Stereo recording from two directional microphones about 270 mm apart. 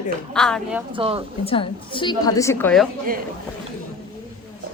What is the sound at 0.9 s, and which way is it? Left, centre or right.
Speech, centre.